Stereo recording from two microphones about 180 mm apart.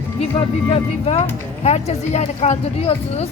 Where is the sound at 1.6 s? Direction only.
40° left (ahead or behind).